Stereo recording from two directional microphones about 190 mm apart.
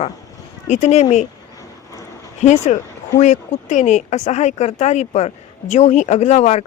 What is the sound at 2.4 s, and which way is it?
Speech, 40° left (ahead or behind).